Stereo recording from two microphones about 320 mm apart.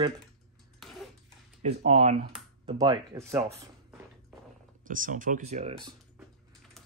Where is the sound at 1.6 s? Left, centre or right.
Right.